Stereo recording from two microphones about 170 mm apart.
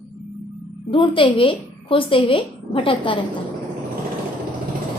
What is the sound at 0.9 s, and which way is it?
A woman's voice, 30° left (ahead or behind).